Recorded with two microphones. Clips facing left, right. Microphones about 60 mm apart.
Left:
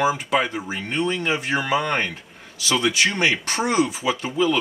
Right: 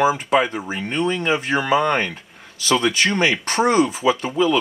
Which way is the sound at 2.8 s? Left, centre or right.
Centre.